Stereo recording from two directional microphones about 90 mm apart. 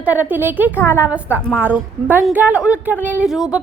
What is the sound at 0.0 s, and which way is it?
A woman's voice, 20° right (ahead or behind).